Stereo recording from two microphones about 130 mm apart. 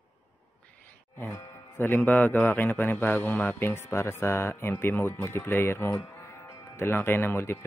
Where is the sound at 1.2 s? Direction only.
15° left (ahead or behind).